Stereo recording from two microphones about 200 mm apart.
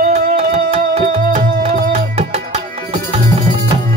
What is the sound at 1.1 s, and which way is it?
Tabla, 40° right (ahead or behind).